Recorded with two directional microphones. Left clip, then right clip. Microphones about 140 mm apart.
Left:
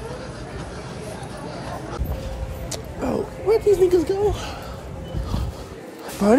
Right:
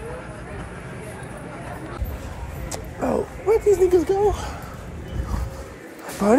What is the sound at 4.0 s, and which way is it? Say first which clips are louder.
Speech: right 1 dB; centre (ahead or behind).